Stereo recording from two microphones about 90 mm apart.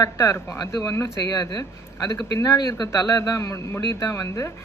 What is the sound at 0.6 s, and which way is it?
Speech, 40° left (ahead or behind).